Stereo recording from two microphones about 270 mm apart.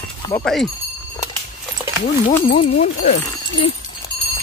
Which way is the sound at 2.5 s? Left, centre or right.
Left.